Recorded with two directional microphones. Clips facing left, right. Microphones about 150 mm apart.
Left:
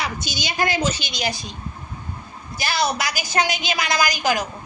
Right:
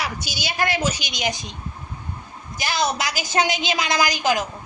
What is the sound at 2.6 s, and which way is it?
A woman's voice, 20° right (ahead or behind).